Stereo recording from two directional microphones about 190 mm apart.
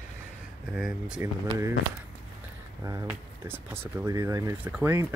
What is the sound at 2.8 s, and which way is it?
Speech, 15° right (ahead or behind).